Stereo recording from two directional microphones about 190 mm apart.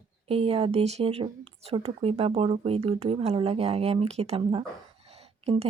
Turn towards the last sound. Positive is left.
turn(degrees=-30)  # may be behind; listen again after turning